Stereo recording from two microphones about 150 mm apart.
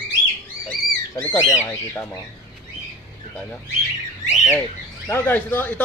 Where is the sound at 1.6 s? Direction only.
15° left (ahead or behind).